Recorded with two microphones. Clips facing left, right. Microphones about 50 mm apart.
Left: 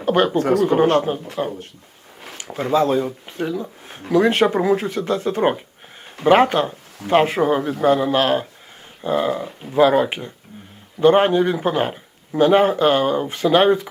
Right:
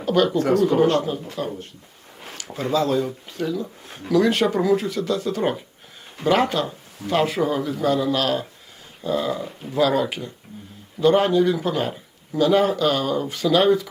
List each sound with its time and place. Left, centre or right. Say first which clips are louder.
0.0 s speech: left 2 dB; left